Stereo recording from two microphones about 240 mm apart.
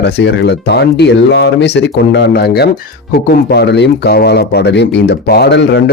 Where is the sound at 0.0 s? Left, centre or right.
Left.